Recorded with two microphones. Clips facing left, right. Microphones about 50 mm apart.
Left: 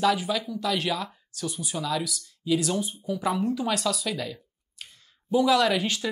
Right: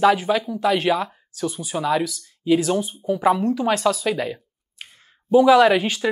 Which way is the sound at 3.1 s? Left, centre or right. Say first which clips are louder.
Right 7 dB; centre.